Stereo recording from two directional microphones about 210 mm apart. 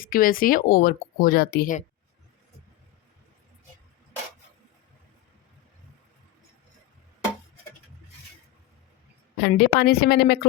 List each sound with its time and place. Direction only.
0.0 s speech: 40° left (ahead or behind)
9.4 s speech: 50° left (ahead or behind)